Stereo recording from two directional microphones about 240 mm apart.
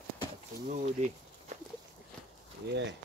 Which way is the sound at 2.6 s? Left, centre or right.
Right.